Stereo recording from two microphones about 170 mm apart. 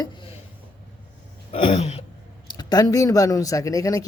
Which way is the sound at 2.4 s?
25° left (ahead or behind).